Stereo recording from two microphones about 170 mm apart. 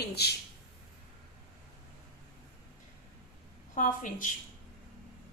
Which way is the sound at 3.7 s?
50° left (ahead or behind).